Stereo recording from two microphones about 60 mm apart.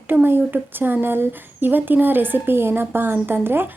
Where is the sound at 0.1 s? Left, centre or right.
Right.